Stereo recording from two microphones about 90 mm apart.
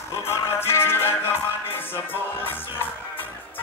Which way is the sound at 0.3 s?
30° left (ahead or behind).